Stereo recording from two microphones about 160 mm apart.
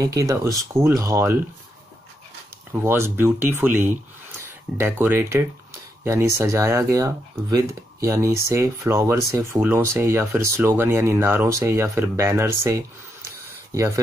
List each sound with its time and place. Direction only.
0.0 s speech: 20° right (ahead or behind)
2.7 s speech: 15° right (ahead or behind)